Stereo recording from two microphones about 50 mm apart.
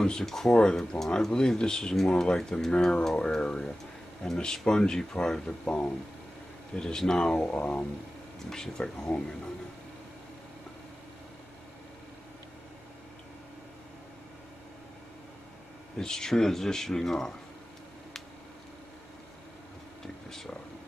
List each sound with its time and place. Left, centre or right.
0.0 s speech: centre
7.3 s speech: left
8.5 s speech: centre
16.0 s speech: centre
20.2 s a sound: centre